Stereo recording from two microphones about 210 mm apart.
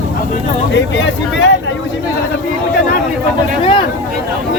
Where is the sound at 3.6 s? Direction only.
25° left (ahead or behind).